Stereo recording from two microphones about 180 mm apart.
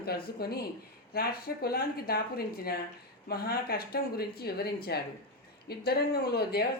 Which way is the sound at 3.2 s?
55° left (ahead or behind).